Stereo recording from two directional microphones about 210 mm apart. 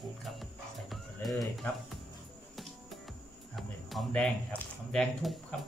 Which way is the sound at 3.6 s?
Centre (ahead or behind).